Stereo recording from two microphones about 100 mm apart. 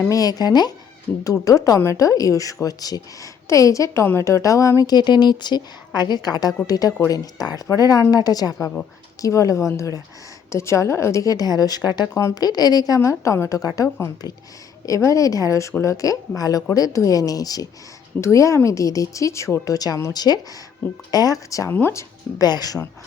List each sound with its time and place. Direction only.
0.1 s a woman's voice: 40° left (ahead or behind)
21.7 s speech: 20° left (ahead or behind)
22.4 s a woman's voice: 40° left (ahead or behind)